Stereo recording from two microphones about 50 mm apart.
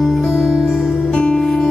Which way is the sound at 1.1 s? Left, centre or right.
Centre.